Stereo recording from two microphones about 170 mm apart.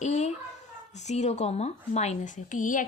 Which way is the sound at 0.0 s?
40° left (ahead or behind).